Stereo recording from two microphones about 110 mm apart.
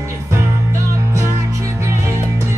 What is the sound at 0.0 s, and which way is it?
Music, 25° right (ahead or behind).